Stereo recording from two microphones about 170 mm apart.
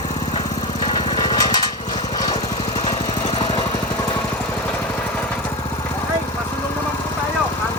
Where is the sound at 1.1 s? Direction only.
25° left (ahead or behind).